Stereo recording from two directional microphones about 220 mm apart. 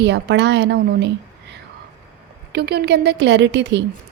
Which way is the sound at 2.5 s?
50° right (ahead or behind).